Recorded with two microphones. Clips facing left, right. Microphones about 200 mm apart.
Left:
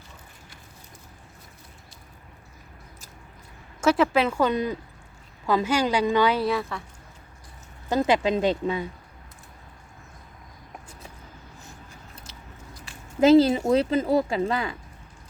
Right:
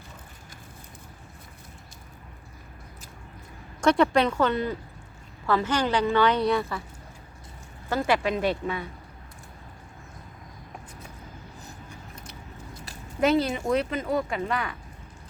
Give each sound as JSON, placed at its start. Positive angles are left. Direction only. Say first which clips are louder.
{"t": 3.8, "sound": "a woman's voice", "louder": "even", "side_deg": 5}
{"t": 7.9, "sound": "a woman's voice", "louder": "left 3 dB", "side_deg": 20}
{"t": 13.1, "sound": "speech", "louder": "left 7 dB", "side_deg": 30}